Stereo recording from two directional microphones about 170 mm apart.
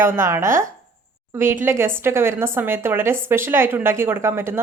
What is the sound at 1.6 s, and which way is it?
A woman's voice, 15° right (ahead or behind).